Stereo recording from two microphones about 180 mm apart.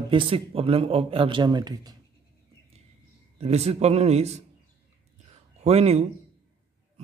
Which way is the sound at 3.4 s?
35° right (ahead or behind).